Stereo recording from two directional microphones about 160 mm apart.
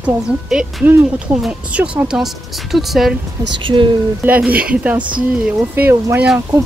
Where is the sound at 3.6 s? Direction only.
30° right (ahead or behind).